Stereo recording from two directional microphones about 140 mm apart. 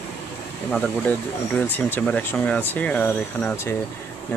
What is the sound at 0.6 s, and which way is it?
Speech, 10° left (ahead or behind).